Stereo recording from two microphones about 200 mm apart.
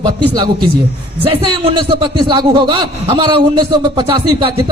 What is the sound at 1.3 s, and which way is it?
A man's voice, 25° right (ahead or behind).